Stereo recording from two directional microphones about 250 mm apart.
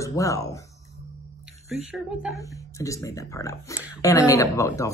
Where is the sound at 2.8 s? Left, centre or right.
Centre.